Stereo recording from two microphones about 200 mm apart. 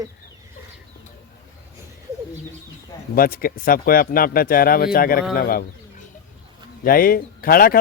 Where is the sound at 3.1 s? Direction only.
45° left (ahead or behind).